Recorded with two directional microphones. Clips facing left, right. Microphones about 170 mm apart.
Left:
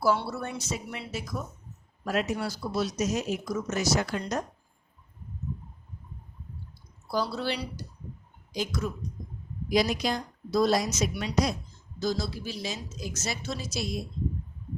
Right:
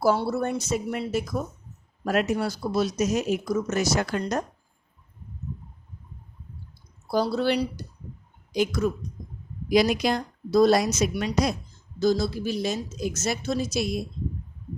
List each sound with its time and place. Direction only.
0.0 s speech: 45° right (ahead or behind)
7.1 s speech: 55° right (ahead or behind)